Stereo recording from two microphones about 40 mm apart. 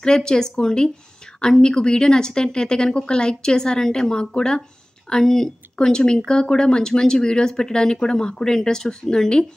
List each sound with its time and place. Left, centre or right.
0.0 s speech: centre